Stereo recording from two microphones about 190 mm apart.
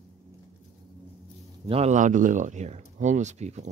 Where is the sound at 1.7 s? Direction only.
35° right (ahead or behind).